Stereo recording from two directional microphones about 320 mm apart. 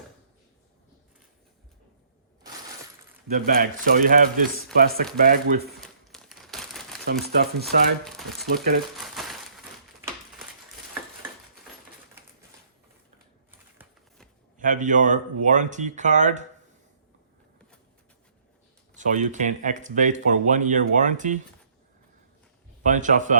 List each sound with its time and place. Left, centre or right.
3.2 s speech: right
5.6 s crumpling: centre
7.3 s speech: right
8.0 s speech: centre
8.5 s speech: right
9.0 s crumpling: centre
14.6 s speech: right
18.9 s speech: right
22.8 s speech: right